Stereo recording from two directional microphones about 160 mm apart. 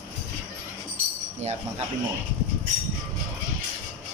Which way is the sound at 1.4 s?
45° right (ahead or behind).